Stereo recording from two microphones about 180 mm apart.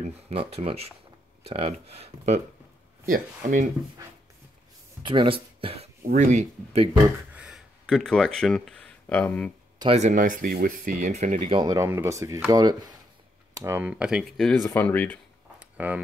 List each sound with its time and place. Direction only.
0.0 s speech: 35° right (ahead or behind)
5.0 s speech: 30° right (ahead or behind)
6.0 s speech: 40° right (ahead or behind)
7.3 s a sound: 5° right (ahead or behind)
9.9 s speech: 45° right (ahead or behind); by 15.1 s 10° left (ahead or behind)
15.8 s speech: 10° right (ahead or behind)